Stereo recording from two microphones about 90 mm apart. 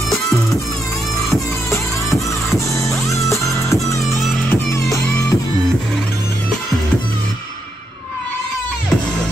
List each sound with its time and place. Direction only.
2.0 s music: centre (ahead or behind)
3.8 s music: 35° left (ahead or behind)